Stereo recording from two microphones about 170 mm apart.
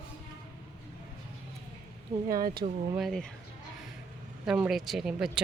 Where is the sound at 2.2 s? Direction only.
60° right (ahead or behind).